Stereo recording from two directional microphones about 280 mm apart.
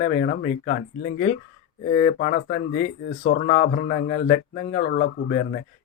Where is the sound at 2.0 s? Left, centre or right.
Left.